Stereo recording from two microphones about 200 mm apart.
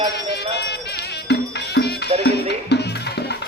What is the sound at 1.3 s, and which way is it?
Music, 55° left (ahead or behind).